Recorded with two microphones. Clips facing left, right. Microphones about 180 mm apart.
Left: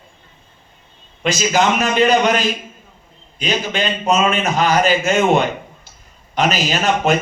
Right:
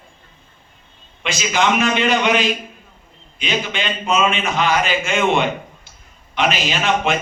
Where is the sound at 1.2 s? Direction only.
40° left (ahead or behind).